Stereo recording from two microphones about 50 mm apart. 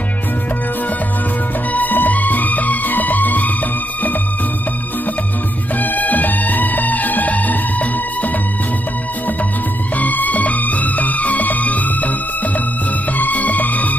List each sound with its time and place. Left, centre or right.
1.7 s music: left
5.8 s music: left
9.9 s music: left
13.2 s music: left